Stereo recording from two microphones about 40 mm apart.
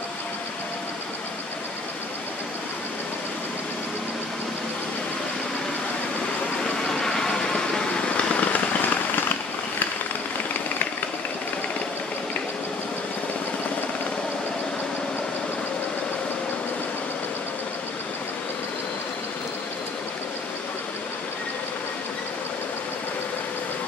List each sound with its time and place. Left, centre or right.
6.8 s vehicle: centre
8.0 s fireworks: left